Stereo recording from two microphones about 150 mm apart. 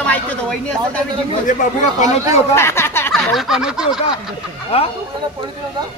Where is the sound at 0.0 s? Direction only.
10° left (ahead or behind).